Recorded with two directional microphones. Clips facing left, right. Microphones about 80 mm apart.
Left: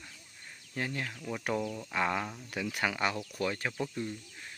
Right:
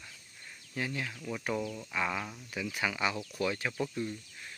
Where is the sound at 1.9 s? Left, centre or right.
Left.